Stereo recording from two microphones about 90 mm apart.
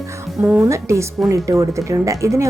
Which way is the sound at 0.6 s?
35° right (ahead or behind).